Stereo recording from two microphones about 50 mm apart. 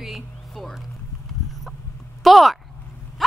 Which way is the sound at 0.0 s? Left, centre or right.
Centre.